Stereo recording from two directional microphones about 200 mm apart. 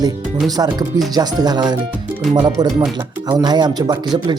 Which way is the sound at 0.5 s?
20° right (ahead or behind).